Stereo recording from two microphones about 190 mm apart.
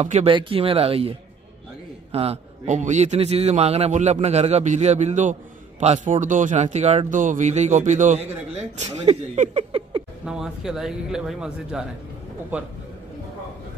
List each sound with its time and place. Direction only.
0.0 s a man's voice: 35° right (ahead or behind)
2.1 s a man's voice: 35° right (ahead or behind)
10.2 s a man's voice: 5° right (ahead or behind)